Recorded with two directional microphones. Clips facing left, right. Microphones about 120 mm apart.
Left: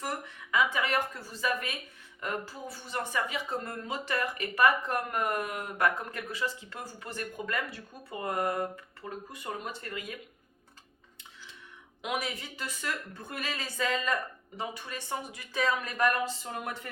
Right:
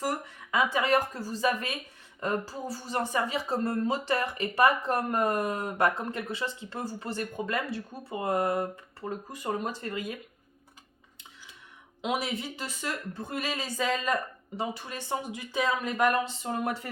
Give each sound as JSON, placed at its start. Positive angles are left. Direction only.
{"t": 0.5, "sound": "speech", "side_deg": -35}
{"t": 12.0, "sound": "speech", "side_deg": -25}
{"t": 13.8, "sound": "speech", "side_deg": -10}
{"t": 14.5, "sound": "speech", "side_deg": -25}